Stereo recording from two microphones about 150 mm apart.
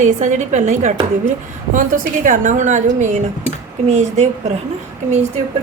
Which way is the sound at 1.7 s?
65° right (ahead or behind).